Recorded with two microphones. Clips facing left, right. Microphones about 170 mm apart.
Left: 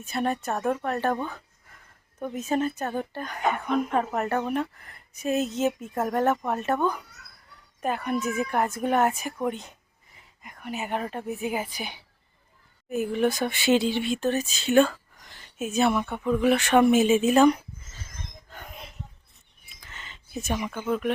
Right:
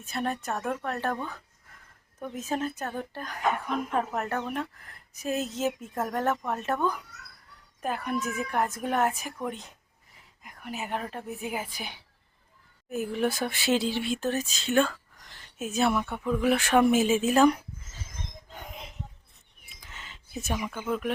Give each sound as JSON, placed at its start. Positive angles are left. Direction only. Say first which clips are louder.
{"t": 0.0, "sound": "speech", "louder": "left 4 dB", "side_deg": 0}
{"t": 2.2, "sound": "a woman's voice", "louder": "left 5 dB", "side_deg": 0}
{"t": 18.4, "sound": "a sound", "louder": "left 1 dB", "side_deg": -15}